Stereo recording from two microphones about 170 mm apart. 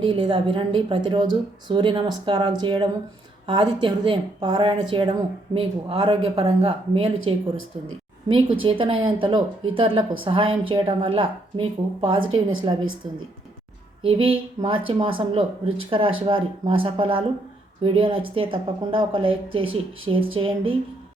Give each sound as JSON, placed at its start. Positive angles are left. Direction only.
{"t": 0.0, "sound": "speech", "side_deg": -30}
{"t": 14.0, "sound": "speech", "side_deg": -30}